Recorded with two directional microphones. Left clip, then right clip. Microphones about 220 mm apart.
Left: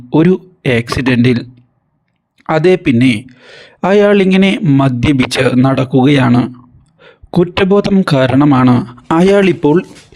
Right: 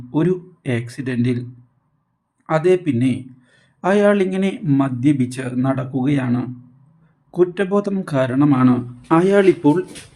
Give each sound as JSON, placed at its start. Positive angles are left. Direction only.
{"t": 0.1, "sound": "speech", "side_deg": 35}